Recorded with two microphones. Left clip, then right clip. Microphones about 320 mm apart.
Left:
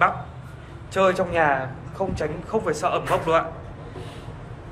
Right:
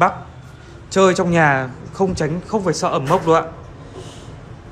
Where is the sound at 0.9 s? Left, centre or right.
Right.